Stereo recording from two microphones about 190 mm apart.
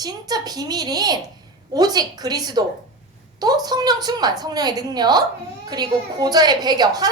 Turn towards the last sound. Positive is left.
turn(degrees=-20)  # may be behind; listen again after turning